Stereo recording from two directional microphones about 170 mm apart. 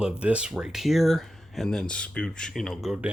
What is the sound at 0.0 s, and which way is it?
Speech, 5° right (ahead or behind).